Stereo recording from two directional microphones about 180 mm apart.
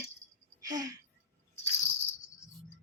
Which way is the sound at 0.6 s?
20° right (ahead or behind).